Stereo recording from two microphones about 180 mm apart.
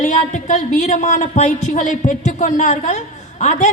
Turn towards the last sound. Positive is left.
turn(degrees=40)  # may be behind; listen again after turning